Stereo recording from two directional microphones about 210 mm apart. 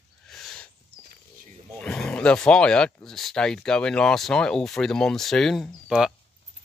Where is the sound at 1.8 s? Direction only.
5° left (ahead or behind).